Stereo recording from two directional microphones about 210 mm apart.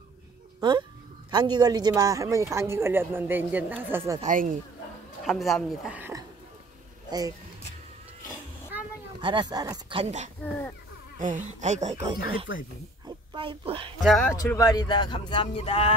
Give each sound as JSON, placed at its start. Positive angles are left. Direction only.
{"t": 0.6, "sound": "a sound", "side_deg": -20}
{"t": 1.3, "sound": "speech", "side_deg": -20}
{"t": 4.2, "sound": "speech", "side_deg": -40}
{"t": 5.2, "sound": "speech", "side_deg": 0}
{"t": 9.2, "sound": "speech", "side_deg": -20}
{"t": 13.0, "sound": "a sound", "side_deg": -25}
{"t": 14.0, "sound": "speech", "side_deg": 0}
{"t": 14.3, "sound": "speech", "side_deg": 15}